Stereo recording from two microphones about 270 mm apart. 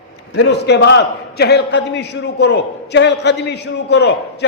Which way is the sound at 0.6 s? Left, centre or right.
Left.